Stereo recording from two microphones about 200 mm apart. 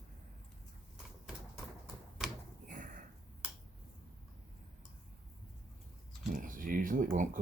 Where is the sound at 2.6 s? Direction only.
40° right (ahead or behind).